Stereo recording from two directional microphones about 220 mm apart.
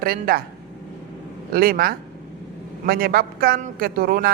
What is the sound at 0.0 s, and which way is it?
Speech, 45° right (ahead or behind).